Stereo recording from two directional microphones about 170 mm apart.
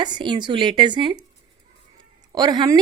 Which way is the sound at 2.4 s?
25° right (ahead or behind).